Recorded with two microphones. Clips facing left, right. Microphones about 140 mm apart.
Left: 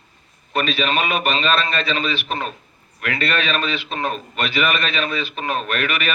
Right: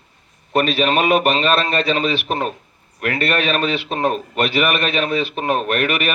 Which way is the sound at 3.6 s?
40° right (ahead or behind).